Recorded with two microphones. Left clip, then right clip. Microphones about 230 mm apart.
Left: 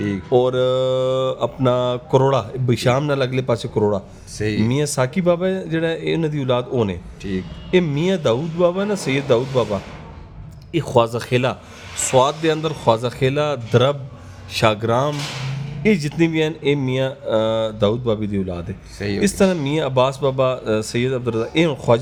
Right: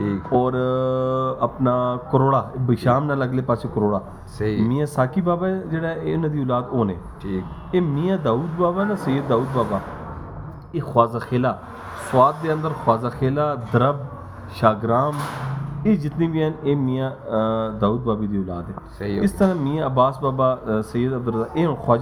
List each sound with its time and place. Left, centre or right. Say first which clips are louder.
0.3 s mantra: left 4 dB; left
4.4 s speech: left 1 dB; centre
4.7 s mantra: left 2 dB; left
7.3 s speech: left 2 dB; left
7.7 s mantra: left 4 dB; left
10.8 s mantra: left 2 dB; left
18.9 s speech: left 2 dB; left
19.2 s mantra: left 3 dB; left